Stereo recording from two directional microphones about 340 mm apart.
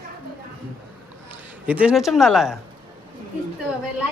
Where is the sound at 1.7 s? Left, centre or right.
Centre.